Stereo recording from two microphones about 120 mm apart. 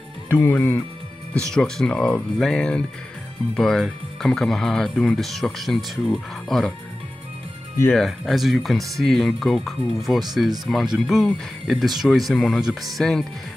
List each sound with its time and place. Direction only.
0.3 s speech: 15° left (ahead or behind)
7.9 s speech: centre (ahead or behind)